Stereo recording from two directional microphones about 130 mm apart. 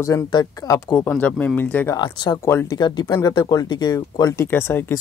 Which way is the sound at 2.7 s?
35° left (ahead or behind).